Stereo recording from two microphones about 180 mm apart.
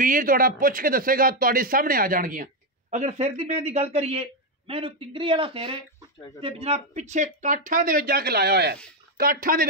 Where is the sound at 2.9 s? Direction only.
40° right (ahead or behind); by 8.8 s 65° right (ahead or behind).